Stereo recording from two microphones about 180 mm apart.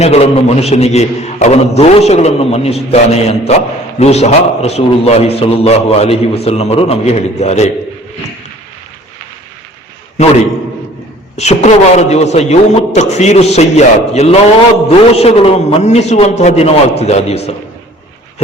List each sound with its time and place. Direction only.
0.0 s a man's voice: 35° left (ahead or behind)
11.3 s a man's voice: 40° left (ahead or behind)